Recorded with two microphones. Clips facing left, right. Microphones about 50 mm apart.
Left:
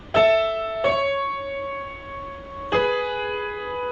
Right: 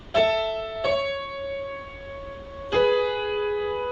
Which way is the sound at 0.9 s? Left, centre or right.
Left.